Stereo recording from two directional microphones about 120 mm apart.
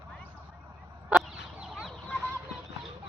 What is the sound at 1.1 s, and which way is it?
Fowl, 10° right (ahead or behind).